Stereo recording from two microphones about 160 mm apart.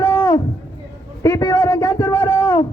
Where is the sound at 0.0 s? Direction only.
15° left (ahead or behind).